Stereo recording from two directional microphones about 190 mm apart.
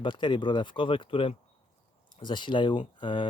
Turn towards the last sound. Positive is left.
turn(degrees=25)  # may be behind; listen again after turning